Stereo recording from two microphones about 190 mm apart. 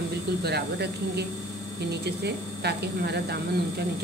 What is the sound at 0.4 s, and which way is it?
Speech, 60° right (ahead or behind).